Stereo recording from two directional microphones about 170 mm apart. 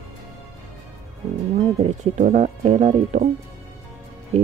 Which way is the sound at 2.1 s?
45° right (ahead or behind).